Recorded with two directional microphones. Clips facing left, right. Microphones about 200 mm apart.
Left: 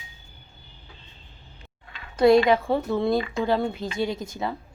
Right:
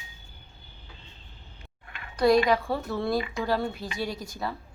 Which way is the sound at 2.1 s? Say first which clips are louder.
Left 4 dB; 25° left (ahead or behind).